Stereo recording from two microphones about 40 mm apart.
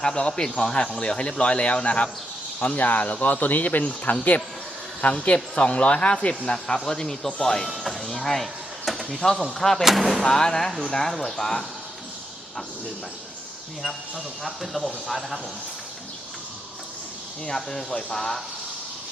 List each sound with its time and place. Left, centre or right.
0.0 s speech: left
2.7 s speech: left
3.4 s speech: left
3.8 s speech: left; by 8.9 s centre
8.9 s a sound: centre
9.2 s speech: centre
9.8 s speech: centre
10.2 s speech: centre
14.4 s speech: centre
17.5 s speech: centre